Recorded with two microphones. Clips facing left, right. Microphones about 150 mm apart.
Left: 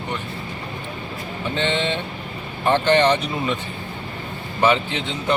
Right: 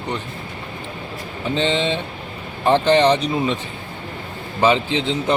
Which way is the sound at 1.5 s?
30° right (ahead or behind).